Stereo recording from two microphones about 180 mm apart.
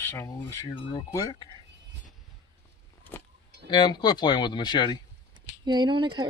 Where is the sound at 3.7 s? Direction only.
25° left (ahead or behind).